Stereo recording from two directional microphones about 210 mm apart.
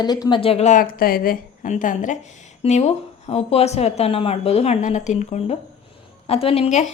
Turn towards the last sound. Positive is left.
turn(degrees=30)  # may be behind; listen again after turning